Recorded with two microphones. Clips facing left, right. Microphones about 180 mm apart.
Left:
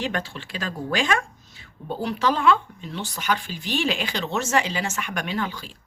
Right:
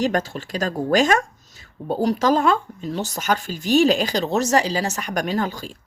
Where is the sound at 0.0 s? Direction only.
40° right (ahead or behind).